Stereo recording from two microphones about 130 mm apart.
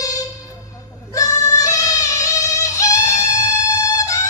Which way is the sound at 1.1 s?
25° left (ahead or behind).